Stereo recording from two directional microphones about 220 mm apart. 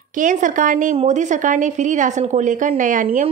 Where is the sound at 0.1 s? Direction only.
35° right (ahead or behind).